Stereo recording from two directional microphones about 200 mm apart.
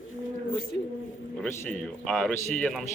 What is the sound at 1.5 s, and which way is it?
A man's voice, 10° left (ahead or behind).